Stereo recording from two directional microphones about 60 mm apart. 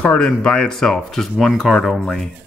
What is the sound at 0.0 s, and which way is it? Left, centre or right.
Speech, centre.